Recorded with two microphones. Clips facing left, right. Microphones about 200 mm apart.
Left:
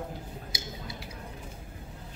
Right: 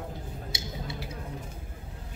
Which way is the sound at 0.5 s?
25° right (ahead or behind).